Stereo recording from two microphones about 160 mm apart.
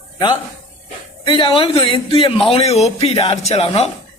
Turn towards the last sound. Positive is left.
turn(degrees=40)  # may be behind; listen again after turning